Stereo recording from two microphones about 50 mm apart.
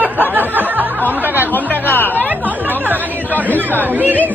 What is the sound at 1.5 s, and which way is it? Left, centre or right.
Speech, left.